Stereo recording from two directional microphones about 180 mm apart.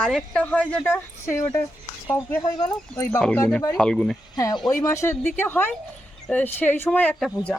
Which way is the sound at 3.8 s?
5° left (ahead or behind).